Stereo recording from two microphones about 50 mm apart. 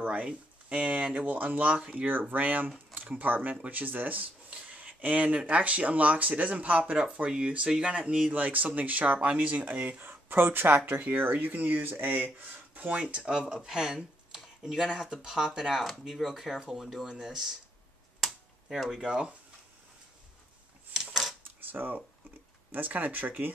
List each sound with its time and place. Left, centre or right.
0.0 s speech: right
2.3 s speech: right; by 8.3 s centre
8.3 s speech: right
10.9 s speech: right; by 17.6 s centre
18.8 s speech: centre
20.9 s a sound: centre
21.5 s coin: right
22.7 s speech: right